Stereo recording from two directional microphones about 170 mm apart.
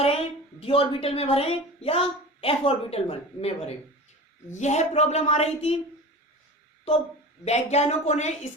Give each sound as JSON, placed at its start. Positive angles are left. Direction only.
{"t": 0.0, "sound": "a woman's voice", "side_deg": 35}
{"t": 7.4, "sound": "a woman's voice", "side_deg": 40}